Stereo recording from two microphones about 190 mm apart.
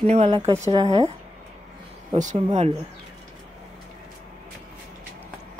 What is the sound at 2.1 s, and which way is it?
Speech, 35° right (ahead or behind).